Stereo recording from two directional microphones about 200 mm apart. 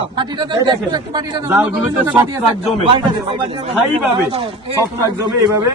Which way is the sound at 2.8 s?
25° right (ahead or behind).